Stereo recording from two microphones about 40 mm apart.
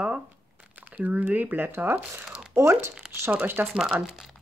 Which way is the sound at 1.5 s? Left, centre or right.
Right.